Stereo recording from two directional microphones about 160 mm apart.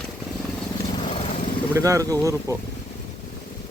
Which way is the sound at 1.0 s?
35° left (ahead or behind).